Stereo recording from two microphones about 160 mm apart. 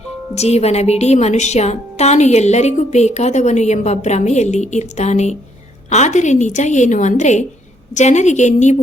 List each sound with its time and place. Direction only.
0.3 s a woman's voice: 45° left (ahead or behind)